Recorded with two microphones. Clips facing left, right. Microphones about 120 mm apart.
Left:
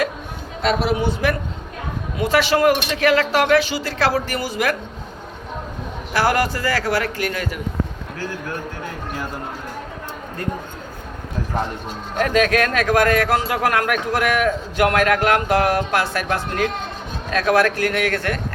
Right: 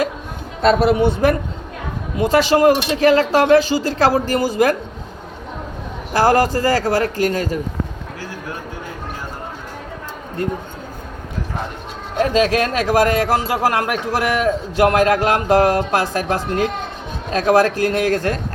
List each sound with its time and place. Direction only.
0.7 s a man's voice: 55° right (ahead or behind)
2.1 s speech: 35° right (ahead or behind)
6.1 s speech: 40° right (ahead or behind)
12.2 s a man's voice: 25° right (ahead or behind)